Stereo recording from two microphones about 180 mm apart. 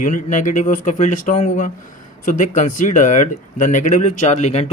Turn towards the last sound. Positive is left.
turn(degrees=35)  # may be behind; listen again after turning